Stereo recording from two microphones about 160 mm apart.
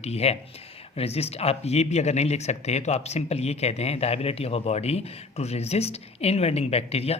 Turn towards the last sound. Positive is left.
turn(degrees=40)  # may be behind; listen again after turning